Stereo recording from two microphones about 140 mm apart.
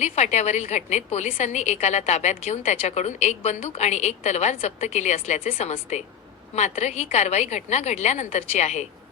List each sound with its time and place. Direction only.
0.0 s a woman's voice: 55° left (ahead or behind)